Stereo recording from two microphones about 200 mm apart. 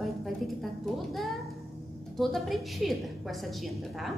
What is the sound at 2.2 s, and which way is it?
A woman's voice, centre (ahead or behind).